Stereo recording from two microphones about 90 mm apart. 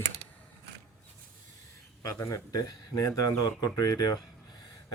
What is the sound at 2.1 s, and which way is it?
Speech, 40° left (ahead or behind).